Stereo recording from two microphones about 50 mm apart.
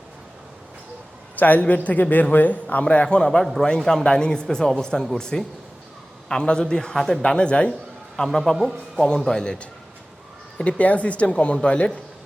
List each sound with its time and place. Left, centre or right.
1.4 s a man's voice: left
2.8 s speech: left
8.1 s a man's voice: centre
10.6 s speech: left